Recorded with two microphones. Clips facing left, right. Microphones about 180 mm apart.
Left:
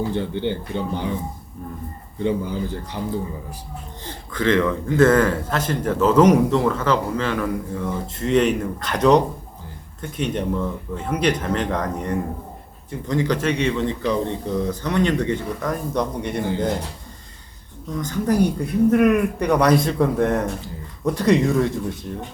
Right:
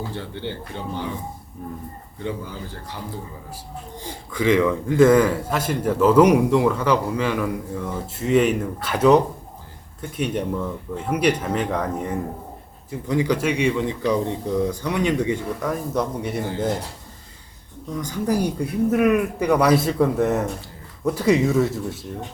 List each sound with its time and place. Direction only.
0.2 s a man's voice: 20° left (ahead or behind)
2.2 s a man's voice: 20° left (ahead or behind)
4.0 s a man's voice: 10° right (ahead or behind)
17.9 s a man's voice: 10° right (ahead or behind)